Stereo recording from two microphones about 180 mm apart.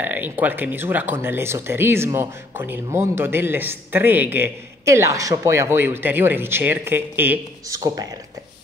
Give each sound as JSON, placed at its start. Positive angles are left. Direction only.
{"t": 0.0, "sound": "speech", "side_deg": -10}